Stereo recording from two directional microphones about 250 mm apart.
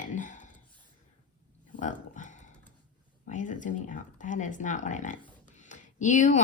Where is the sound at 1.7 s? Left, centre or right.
Left.